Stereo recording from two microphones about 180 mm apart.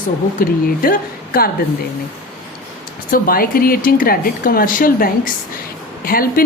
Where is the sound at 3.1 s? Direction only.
55° left (ahead or behind).